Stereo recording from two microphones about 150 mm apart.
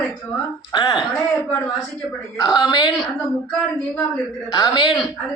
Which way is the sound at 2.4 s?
25° left (ahead or behind).